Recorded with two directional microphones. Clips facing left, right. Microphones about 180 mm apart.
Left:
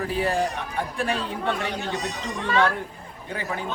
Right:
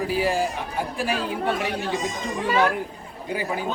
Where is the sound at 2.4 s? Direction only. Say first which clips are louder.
Right 1 dB; 10° right (ahead or behind).